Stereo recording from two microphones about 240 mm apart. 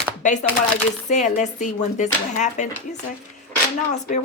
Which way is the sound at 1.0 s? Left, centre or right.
Left.